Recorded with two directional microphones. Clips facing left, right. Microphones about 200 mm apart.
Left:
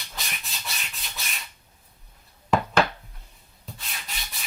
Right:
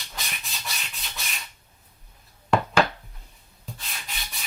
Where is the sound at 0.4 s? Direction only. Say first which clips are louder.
Even; centre (ahead or behind).